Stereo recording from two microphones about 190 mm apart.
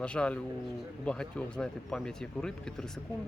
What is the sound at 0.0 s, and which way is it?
Speech, 5° left (ahead or behind).